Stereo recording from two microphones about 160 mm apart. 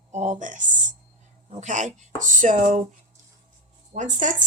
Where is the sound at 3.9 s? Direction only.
50° right (ahead or behind).